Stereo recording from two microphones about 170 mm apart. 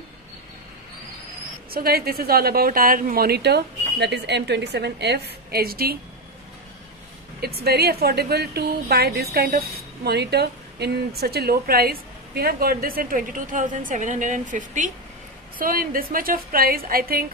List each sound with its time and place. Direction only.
1.7 s speech: 65° right (ahead or behind)
7.3 s a woman's voice: 70° right (ahead or behind)